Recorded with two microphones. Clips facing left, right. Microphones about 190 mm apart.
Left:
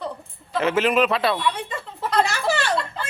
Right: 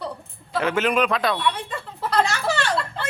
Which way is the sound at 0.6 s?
5° left (ahead or behind).